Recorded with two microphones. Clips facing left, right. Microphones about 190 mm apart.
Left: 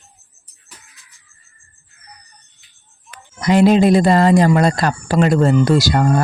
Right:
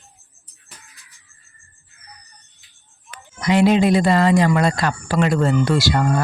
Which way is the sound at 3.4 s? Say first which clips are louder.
Left 3 dB; 40° left (ahead or behind).